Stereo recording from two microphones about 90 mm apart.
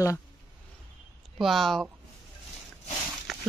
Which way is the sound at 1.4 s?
Centre (ahead or behind).